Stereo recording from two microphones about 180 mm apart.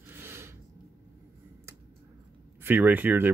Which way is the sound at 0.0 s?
15° right (ahead or behind).